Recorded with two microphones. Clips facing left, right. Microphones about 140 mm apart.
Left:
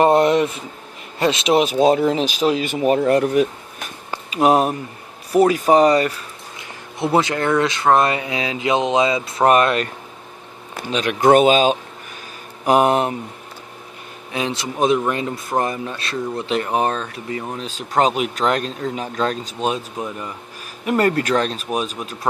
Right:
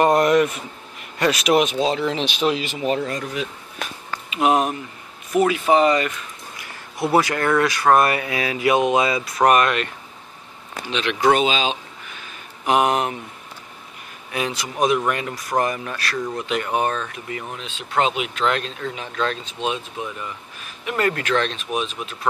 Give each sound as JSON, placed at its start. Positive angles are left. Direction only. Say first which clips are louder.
{"t": 0.0, "sound": "speech", "louder": "left 2 dB", "side_deg": 30}
{"t": 1.8, "sound": "speech", "louder": "left 6 dB", "side_deg": 50}
{"t": 2.7, "sound": "speech", "louder": "left 7 dB", "side_deg": 50}
{"t": 4.3, "sound": "speech", "louder": "left 3 dB", "side_deg": 40}
{"t": 6.6, "sound": "speech", "louder": "left 1 dB", "side_deg": 20}
{"t": 10.9, "sound": "speech", "louder": "left 4 dB", "side_deg": 45}
{"t": 12.6, "sound": "speech", "louder": "left 3 dB", "side_deg": 35}
{"t": 14.3, "sound": "speech", "louder": "left 2 dB", "side_deg": 25}